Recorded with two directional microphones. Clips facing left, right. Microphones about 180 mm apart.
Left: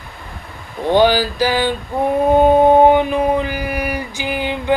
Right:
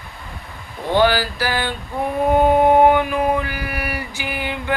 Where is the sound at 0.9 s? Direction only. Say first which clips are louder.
Left 3 dB; 15° left (ahead or behind).